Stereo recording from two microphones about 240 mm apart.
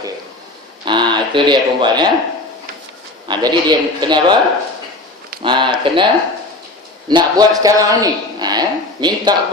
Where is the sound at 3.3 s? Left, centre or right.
Centre.